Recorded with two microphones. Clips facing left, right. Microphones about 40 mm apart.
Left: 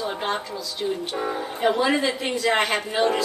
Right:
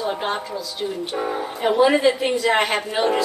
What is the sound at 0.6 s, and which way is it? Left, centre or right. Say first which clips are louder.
Speech: right 1 dB; centre.